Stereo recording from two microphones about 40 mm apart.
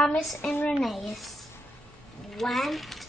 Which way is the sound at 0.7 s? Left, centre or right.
Centre.